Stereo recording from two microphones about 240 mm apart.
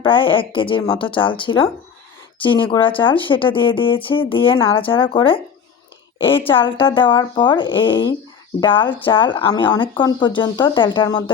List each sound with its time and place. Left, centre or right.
0.0 s a woman's voice: left